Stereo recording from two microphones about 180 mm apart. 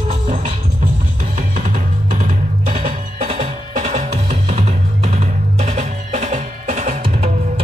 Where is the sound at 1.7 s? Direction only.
45° right (ahead or behind).